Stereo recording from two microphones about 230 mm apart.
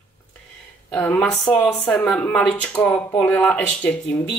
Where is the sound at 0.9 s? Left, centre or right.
Centre.